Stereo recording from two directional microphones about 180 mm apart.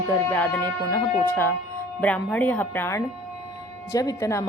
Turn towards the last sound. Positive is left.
turn(degrees=15)  # may be behind; listen again after turning